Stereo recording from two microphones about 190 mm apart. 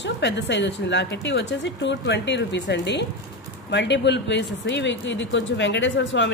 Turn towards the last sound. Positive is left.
turn(degrees=70)  # may be behind; listen again after turning